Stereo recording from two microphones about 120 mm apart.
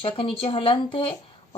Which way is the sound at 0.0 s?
50° left (ahead or behind).